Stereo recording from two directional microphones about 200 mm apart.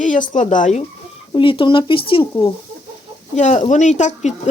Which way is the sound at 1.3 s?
25° left (ahead or behind).